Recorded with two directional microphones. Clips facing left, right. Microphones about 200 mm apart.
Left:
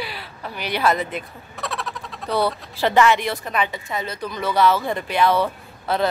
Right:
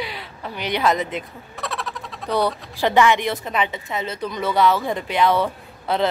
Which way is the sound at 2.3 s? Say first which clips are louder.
Even; 15° right (ahead or behind).